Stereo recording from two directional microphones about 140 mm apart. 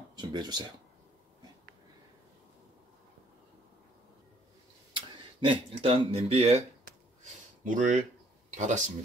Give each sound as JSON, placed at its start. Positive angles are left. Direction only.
{"t": 0.1, "sound": "a sound", "side_deg": -30}
{"t": 4.9, "sound": "speech", "side_deg": -40}
{"t": 7.6, "sound": "speech", "side_deg": -65}